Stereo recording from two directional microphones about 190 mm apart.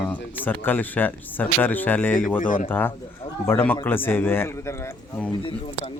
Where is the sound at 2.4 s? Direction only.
45° left (ahead or behind).